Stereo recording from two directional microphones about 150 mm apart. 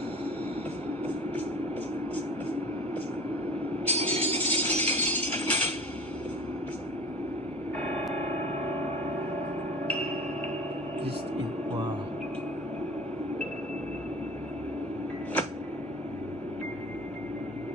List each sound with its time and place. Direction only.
3.8 s music: 45° right (ahead or behind)
4.6 s chink: 10° left (ahead or behind)